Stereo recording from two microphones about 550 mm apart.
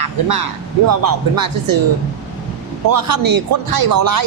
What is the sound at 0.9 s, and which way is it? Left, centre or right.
Speech, right.